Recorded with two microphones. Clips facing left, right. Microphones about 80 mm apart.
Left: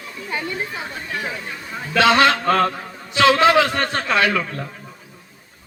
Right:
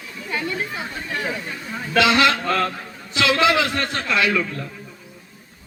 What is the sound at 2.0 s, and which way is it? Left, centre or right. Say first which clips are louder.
A man's voice: left 2 dB; left.